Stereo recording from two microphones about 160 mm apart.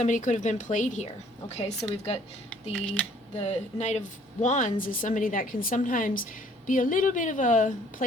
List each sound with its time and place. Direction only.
0.0 s a woman's voice: 50° left (ahead or behind)
2.7 s speech: 5° left (ahead or behind)
3.3 s a woman's voice: 40° left (ahead or behind)